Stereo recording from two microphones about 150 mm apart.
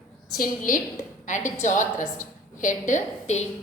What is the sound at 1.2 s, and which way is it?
A woman's voice, 55° left (ahead or behind).